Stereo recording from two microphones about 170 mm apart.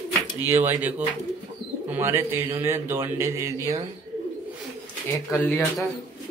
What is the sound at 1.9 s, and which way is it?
A man's voice, 15° right (ahead or behind).